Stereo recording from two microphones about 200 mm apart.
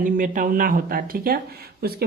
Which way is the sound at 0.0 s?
40° right (ahead or behind).